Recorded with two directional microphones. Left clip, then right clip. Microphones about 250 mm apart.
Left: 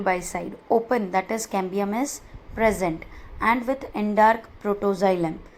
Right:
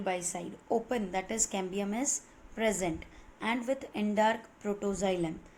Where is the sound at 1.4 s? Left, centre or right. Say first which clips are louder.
Left 8 dB; centre.